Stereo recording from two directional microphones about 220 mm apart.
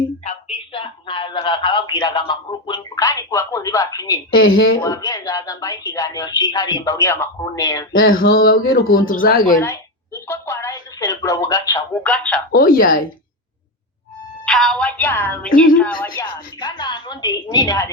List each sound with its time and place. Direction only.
0.3 s speech: 25° left (ahead or behind)
4.4 s speech: 65° left (ahead or behind)
4.8 s speech: 15° left (ahead or behind)
8.1 s mantra: 40° left (ahead or behind)
9.0 s a woman's voice: 40° left (ahead or behind)
10.2 s a sound: 10° left (ahead or behind)
12.5 s a woman's voice: 40° left (ahead or behind)
14.4 s speech: 5° left (ahead or behind)
16.2 s speech: 20° left (ahead or behind)